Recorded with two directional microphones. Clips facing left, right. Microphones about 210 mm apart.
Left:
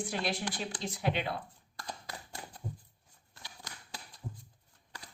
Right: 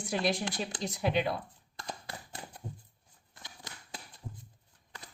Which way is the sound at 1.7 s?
20° right (ahead or behind).